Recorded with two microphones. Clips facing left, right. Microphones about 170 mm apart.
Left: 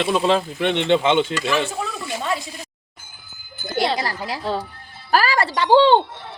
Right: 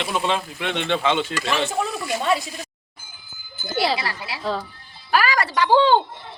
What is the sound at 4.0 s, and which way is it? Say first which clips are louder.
Speech: left 4 dB; 40° left (ahead or behind).